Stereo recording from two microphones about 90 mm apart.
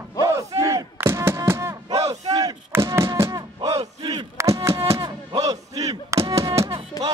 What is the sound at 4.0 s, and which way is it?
Chop, 55° right (ahead or behind).